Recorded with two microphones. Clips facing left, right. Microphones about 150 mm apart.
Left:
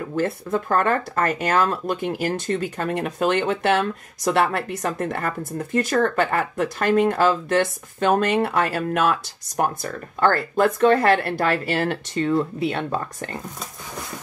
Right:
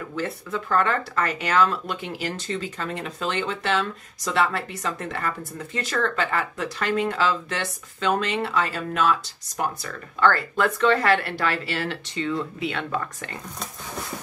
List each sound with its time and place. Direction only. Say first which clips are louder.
0.1 s speech: left 7 dB; 50° left (ahead or behind)